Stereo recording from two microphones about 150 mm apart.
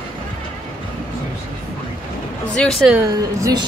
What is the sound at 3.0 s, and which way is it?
Speech, 20° right (ahead or behind).